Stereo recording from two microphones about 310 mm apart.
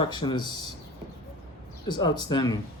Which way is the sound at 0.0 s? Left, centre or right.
Centre.